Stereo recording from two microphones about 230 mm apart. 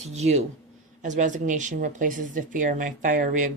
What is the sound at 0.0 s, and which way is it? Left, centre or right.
Speech, right.